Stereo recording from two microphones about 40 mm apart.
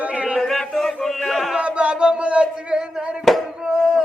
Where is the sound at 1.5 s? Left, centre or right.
Right.